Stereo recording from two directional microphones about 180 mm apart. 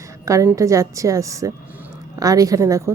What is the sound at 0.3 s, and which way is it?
A woman's voice, 15° right (ahead or behind).